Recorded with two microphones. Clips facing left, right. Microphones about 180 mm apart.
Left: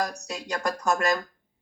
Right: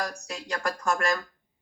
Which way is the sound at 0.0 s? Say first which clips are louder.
Left 3 dB; 40° left (ahead or behind).